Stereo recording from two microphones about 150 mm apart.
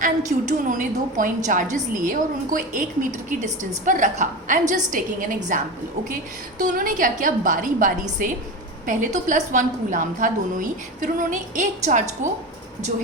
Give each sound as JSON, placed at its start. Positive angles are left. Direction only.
{"t": 0.0, "sound": "a woman's voice", "side_deg": -60}
{"t": 6.6, "sound": "a woman's voice", "side_deg": -65}